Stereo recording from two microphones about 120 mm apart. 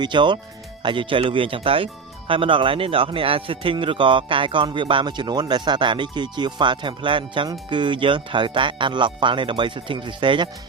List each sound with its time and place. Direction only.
0.0 s speech: 40° right (ahead or behind)